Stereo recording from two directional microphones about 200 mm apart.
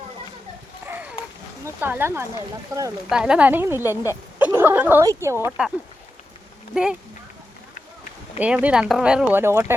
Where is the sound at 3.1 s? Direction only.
5° right (ahead or behind).